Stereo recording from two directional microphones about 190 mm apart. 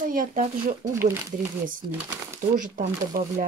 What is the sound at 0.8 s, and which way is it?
Speech, 15° right (ahead or behind).